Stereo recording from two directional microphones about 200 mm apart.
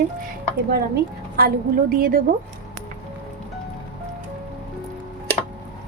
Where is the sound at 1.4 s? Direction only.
50° right (ahead or behind).